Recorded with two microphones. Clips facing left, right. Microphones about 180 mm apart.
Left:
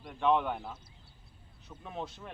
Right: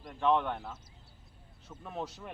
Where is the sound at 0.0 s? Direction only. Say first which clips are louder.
Even; 5° left (ahead or behind).